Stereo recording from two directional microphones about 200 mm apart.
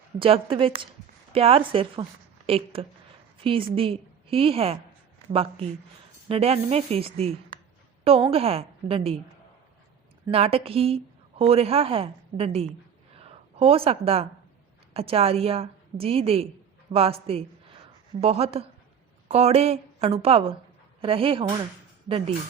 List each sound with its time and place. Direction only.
0.2 s a woman's voice: 25° right (ahead or behind)
10.3 s a woman's voice: 30° right (ahead or behind)